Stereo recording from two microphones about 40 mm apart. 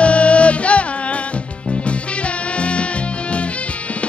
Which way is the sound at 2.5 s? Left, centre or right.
Left.